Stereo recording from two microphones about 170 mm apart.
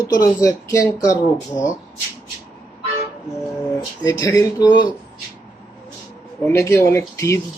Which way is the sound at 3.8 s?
20° left (ahead or behind).